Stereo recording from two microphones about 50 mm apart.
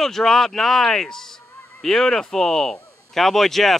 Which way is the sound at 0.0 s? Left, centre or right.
Centre.